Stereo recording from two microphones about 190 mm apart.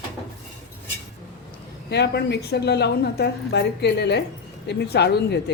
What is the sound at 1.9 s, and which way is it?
A woman's voice, 60° left (ahead or behind).